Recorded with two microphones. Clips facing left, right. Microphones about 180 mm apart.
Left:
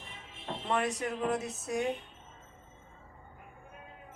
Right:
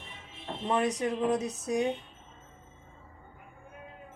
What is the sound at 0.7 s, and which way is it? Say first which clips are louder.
Speech: right 4 dB; 20° right (ahead or behind).